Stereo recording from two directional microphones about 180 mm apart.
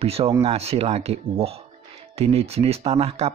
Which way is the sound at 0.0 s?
35° right (ahead or behind).